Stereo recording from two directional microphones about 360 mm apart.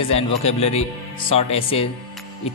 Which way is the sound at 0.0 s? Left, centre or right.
Centre.